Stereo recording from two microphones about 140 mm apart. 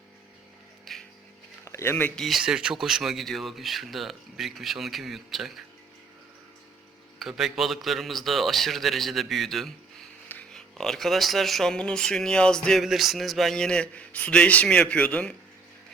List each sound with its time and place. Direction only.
0.9 s a sound: centre (ahead or behind)
1.6 s speech: 20° left (ahead or behind)
2.2 s speech: 5° right (ahead or behind)
7.2 s speech: centre (ahead or behind)